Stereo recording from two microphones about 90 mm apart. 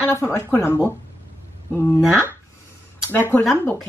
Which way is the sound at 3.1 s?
25° left (ahead or behind).